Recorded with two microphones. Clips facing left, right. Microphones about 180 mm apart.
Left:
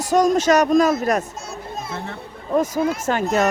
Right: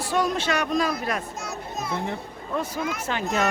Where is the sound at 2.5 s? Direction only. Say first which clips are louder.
Left 9 dB; 40° left (ahead or behind).